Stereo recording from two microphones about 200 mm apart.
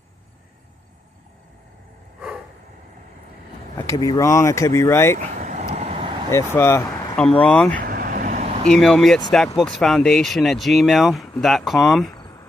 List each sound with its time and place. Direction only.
3.8 s speech: 15° left (ahead or behind)
5.3 s vehicle: 40° right (ahead or behind)
6.3 s speech: 15° left (ahead or behind)
7.8 s vehicle: 45° right (ahead or behind)
8.6 s speech: 5° left (ahead or behind)